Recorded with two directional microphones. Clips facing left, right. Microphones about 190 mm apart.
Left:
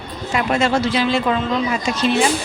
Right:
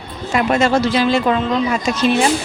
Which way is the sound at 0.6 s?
45° right (ahead or behind).